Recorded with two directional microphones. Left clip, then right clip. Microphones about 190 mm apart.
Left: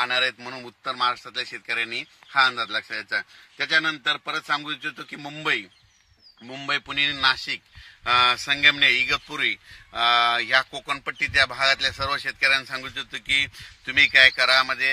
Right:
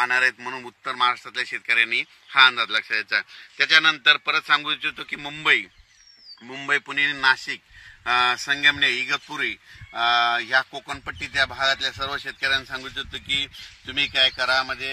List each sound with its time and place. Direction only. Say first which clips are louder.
0.0 s a man's voice: right 3 dB; 55° left (ahead or behind)
0.8 s a man's voice: right 2 dB; 90° left; by 5.7 s 70° left (ahead or behind)
6.4 s speech: right 3 dB; 55° left (ahead or behind); by 14.9 s 15° left (ahead or behind)